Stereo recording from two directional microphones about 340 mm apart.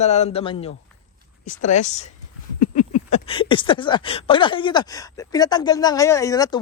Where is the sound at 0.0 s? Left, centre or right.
Centre.